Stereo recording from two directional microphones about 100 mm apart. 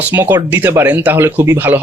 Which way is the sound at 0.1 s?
20° right (ahead or behind).